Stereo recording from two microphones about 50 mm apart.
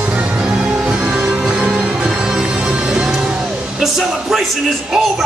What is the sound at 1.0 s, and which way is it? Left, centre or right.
Music, right.